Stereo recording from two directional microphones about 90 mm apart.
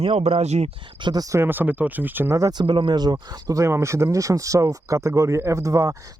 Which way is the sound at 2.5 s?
60° right (ahead or behind).